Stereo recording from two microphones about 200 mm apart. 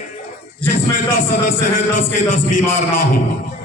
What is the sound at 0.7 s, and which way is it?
A man's voice, 45° left (ahead or behind).